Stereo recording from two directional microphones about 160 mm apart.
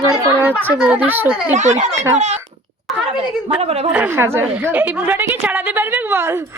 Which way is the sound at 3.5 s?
40° right (ahead or behind).